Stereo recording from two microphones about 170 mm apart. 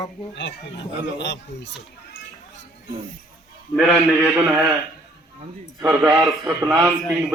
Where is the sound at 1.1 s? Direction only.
90° left.